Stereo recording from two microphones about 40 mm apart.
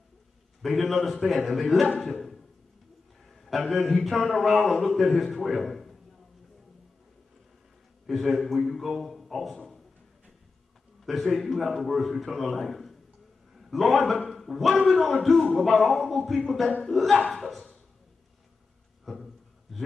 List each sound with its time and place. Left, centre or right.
0.6 s a man's voice: centre
3.3 s a man's voice: centre
8.1 s a man's voice: centre
11.0 s a man's voice: centre
19.0 s a sound: centre